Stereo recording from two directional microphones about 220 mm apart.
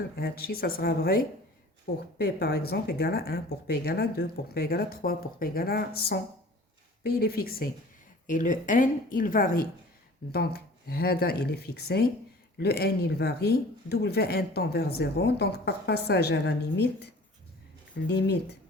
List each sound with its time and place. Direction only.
0.2 s speech: 45° left (ahead or behind)
18.1 s speech: 50° left (ahead or behind)